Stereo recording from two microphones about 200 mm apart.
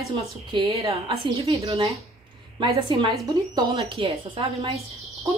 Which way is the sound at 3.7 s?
30° right (ahead or behind).